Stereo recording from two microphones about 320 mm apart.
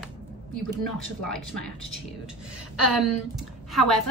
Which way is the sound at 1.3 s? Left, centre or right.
Centre.